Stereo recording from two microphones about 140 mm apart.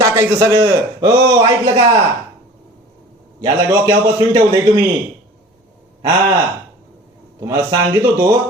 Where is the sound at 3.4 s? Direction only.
25° right (ahead or behind).